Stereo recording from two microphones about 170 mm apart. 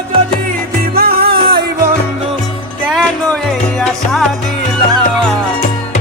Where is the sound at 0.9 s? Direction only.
60° right (ahead or behind).